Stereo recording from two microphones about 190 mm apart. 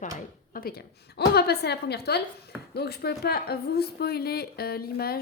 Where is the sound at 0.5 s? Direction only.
55° left (ahead or behind).